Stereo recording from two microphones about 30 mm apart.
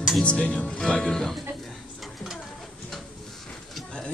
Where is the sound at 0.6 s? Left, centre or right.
Left.